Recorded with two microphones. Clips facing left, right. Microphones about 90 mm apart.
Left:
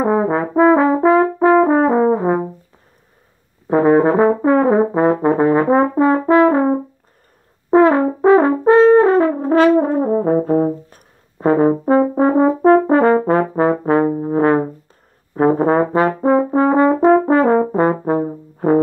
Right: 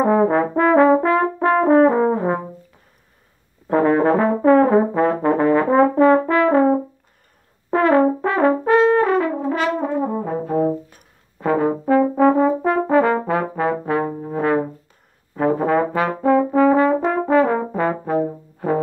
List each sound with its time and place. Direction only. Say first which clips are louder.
0.0 s brass instrument: even; 10° left (ahead or behind)
3.6 s brass instrument: left 3 dB; 20° left (ahead or behind); by 18.8 s 40° left (ahead or behind)